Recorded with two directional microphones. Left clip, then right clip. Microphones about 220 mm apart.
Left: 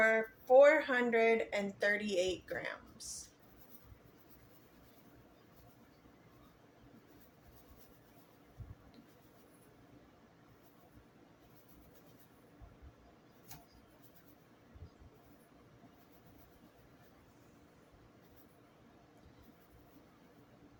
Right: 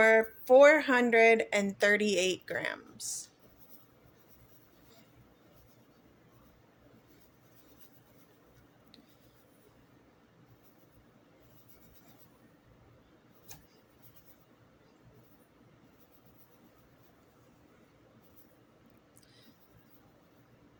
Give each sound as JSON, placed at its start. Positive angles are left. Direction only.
{"t": 0.0, "sound": "speech", "side_deg": -55}